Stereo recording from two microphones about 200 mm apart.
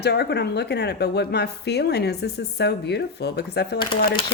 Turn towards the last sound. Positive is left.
turn(degrees=25)  # may be behind; listen again after turning